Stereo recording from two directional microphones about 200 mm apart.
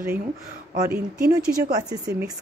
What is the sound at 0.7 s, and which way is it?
A woman's voice, 50° right (ahead or behind).